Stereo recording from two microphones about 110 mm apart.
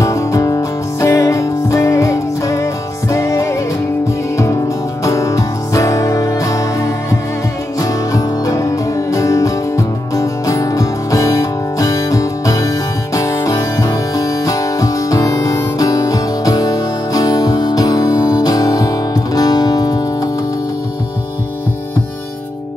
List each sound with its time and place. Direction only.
0.0 s music: 30° left (ahead or behind)
5.0 s music: 30° left (ahead or behind)